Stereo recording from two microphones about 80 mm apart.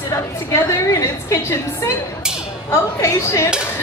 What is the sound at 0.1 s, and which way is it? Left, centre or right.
A woman's voice, left.